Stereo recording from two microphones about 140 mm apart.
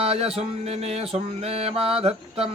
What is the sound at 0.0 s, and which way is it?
Mantra, 45° right (ahead or behind).